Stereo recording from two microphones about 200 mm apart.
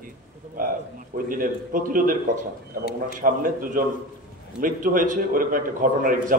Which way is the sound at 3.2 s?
45° right (ahead or behind).